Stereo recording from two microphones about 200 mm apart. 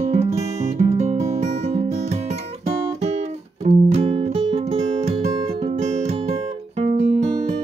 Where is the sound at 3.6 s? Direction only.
35° right (ahead or behind).